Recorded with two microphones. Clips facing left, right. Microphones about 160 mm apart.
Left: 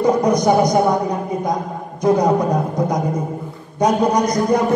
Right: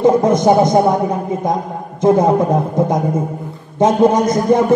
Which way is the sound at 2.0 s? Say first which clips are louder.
Right 3 dB; 25° right (ahead or behind).